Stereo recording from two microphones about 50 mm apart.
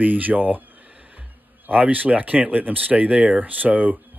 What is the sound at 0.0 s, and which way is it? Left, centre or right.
Speech, right.